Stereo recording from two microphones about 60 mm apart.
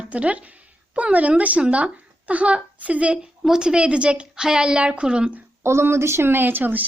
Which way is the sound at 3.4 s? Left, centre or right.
Centre.